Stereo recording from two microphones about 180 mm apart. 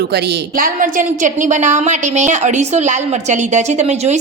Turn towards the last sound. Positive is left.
turn(degrees=-40)  # may be behind; listen again after turning